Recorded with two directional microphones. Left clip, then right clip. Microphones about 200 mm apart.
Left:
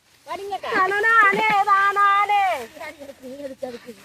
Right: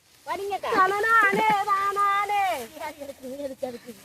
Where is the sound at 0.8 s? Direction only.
40° left (ahead or behind).